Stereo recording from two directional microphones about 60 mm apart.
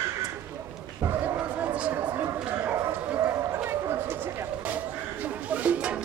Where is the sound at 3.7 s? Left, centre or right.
Right.